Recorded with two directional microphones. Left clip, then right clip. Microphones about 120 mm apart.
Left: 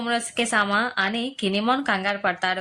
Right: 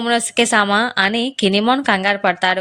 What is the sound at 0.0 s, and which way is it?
Speech, 70° right (ahead or behind).